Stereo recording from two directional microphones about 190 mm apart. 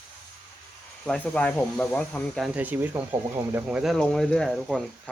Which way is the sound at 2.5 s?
10° right (ahead or behind).